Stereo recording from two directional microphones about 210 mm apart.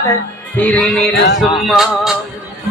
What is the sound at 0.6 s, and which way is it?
Music, 5° left (ahead or behind).